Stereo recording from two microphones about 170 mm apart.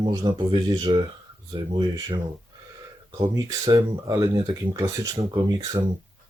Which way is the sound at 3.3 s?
25° right (ahead or behind).